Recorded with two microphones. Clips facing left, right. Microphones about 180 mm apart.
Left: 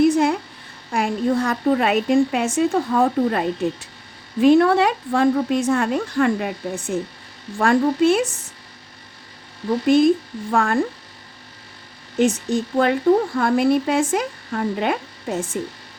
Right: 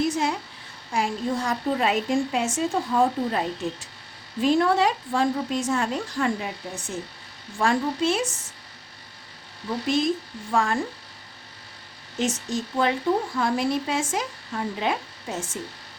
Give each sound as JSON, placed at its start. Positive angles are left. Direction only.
{"t": 0.0, "sound": "a sound", "side_deg": 55}
{"t": 0.9, "sound": "speech", "side_deg": 60}
{"t": 9.8, "sound": "speech", "side_deg": 55}
{"t": 12.2, "sound": "speech", "side_deg": 55}